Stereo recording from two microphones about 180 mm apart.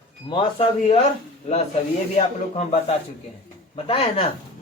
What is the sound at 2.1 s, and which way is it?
Speech, 35° left (ahead or behind).